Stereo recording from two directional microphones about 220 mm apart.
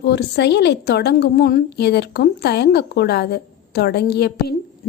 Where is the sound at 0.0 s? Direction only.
50° left (ahead or behind).